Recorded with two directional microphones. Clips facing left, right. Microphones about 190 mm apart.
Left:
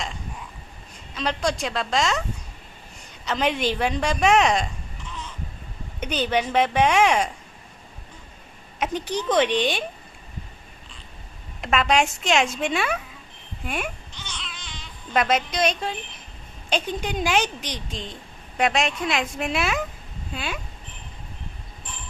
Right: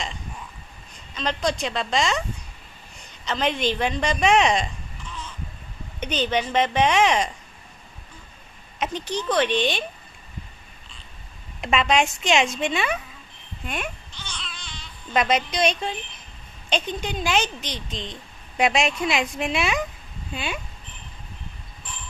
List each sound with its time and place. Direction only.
1.1 s a woman's voice: 10° left (ahead or behind)
3.2 s speech: 10° left (ahead or behind)
6.0 s speech: 10° left (ahead or behind)
8.8 s speech: 10° left (ahead or behind)
11.6 s a woman's voice: centre (ahead or behind)
13.7 s babbling: 10° left (ahead or behind)
15.1 s a woman's voice: centre (ahead or behind)
18.5 s a woman's voice: centre (ahead or behind)